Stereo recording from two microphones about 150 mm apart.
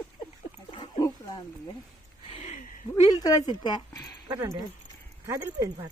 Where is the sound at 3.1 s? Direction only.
25° left (ahead or behind).